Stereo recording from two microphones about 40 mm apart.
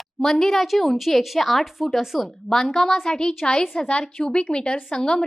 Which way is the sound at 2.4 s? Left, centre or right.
Centre.